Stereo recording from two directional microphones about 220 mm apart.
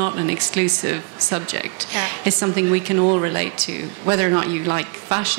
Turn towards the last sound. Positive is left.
turn(degrees=-10)  # may be behind; listen again after turning